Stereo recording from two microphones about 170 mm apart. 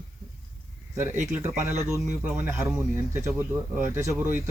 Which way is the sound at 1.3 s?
15° right (ahead or behind).